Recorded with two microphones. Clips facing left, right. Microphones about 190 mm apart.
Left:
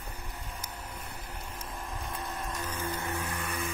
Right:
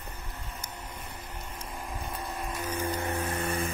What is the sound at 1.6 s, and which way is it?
Vehicle, centre (ahead or behind).